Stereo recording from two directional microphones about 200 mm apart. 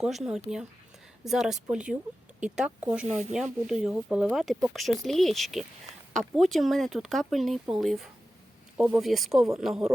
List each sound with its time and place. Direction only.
0.0 s speech: centre (ahead or behind)
3.1 s speech: 35° right (ahead or behind)
3.3 s speech: 5° right (ahead or behind)